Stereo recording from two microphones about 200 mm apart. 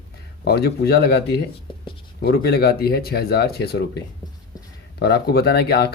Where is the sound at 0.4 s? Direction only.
55° left (ahead or behind).